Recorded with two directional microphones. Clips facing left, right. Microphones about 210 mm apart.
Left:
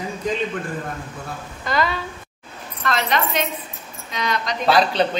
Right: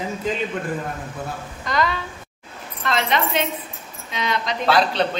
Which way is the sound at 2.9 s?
25° right (ahead or behind).